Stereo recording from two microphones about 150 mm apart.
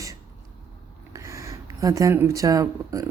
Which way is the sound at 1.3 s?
20° right (ahead or behind).